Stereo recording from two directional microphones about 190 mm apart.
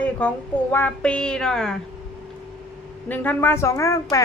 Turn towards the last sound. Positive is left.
turn(degrees=15)  # may be behind; listen again after turning